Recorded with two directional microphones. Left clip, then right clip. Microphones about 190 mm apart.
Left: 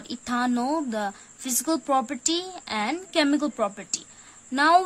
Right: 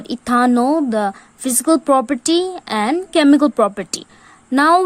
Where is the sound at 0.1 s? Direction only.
40° right (ahead or behind).